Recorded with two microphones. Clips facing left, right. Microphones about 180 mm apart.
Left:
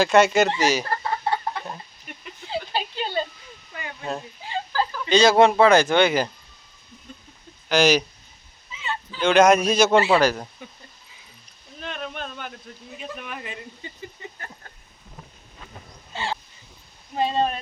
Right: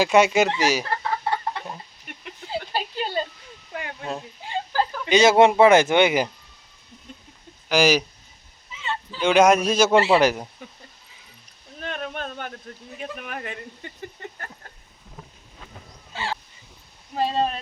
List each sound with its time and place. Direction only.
0.0 s a man's voice: 10° right (ahead or behind)
2.5 s a sound: 10° right (ahead or behind)
4.0 s speech: centre (ahead or behind)
4.7 s speech: 20° right (ahead or behind)
7.7 s a man's voice: 10° right (ahead or behind)
9.1 s a man's voice: 10° right (ahead or behind)
10.2 s speech: 20° right (ahead or behind)
11.8 s a sound: 50° right (ahead or behind)
13.0 s speech: 50° right (ahead or behind)
13.8 s a sound: 55° right (ahead or behind)
16.1 s crow: 20° left (ahead or behind)
17.2 s a sound: 5° right (ahead or behind)